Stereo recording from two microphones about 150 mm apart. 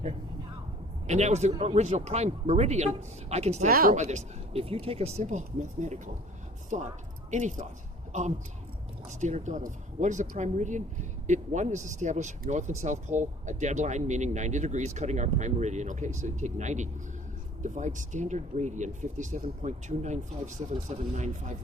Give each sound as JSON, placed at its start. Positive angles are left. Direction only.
{"t": 1.0, "sound": "speech", "side_deg": -50}
{"t": 3.7, "sound": "speech", "side_deg": -75}
{"t": 3.9, "sound": "speech", "side_deg": -50}
{"t": 9.0, "sound": "speech", "side_deg": -55}